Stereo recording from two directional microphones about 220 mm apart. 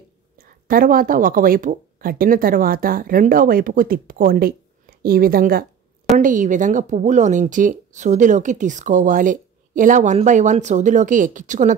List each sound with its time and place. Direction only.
0.4 s speech: 40° right (ahead or behind)